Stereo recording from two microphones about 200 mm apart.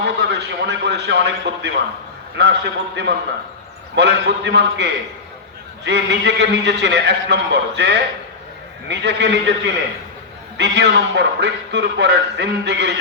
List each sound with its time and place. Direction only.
0.0 s a man's voice: 55° right (ahead or behind)
10.6 s a man's voice: 60° right (ahead or behind)